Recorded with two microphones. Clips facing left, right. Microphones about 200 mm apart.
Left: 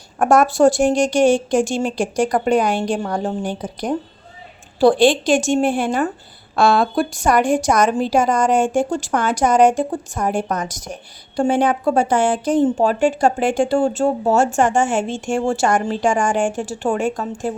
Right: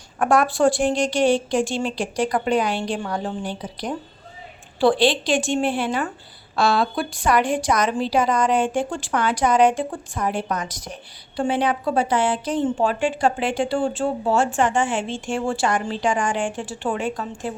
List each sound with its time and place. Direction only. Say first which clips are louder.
0.2 s a woman's voice: left 5 dB; 45° left (ahead or behind)